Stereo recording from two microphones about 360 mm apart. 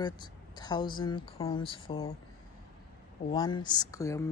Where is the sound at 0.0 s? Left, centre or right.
Centre.